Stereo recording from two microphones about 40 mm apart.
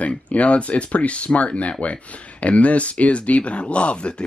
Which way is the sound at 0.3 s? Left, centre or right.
Left.